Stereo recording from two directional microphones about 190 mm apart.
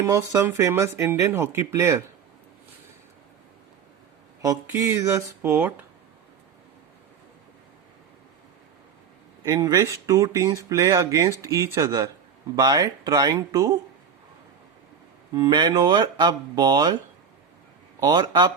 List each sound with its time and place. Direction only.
0.0 s speech: 15° right (ahead or behind)
4.4 s speech: 15° right (ahead or behind)
9.4 s speech: 20° right (ahead or behind)
15.4 s speech: 25° right (ahead or behind)
18.1 s speech: 20° right (ahead or behind)